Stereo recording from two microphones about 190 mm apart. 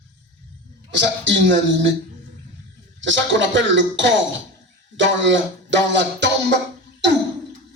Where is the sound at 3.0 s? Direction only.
75° right (ahead or behind).